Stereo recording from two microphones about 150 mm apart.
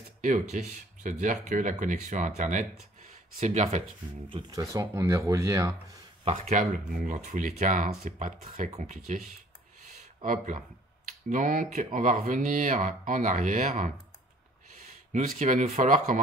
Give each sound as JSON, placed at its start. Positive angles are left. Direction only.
{"t": 0.2, "sound": "speech", "side_deg": -50}
{"t": 4.3, "sound": "speech", "side_deg": -25}
{"t": 6.5, "sound": "speech", "side_deg": -60}
{"t": 8.6, "sound": "speech", "side_deg": -45}
{"t": 10.2, "sound": "speech", "side_deg": -60}
{"t": 15.1, "sound": "speech", "side_deg": -55}